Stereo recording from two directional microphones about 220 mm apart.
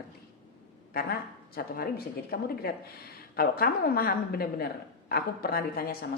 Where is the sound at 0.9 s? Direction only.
45° left (ahead or behind).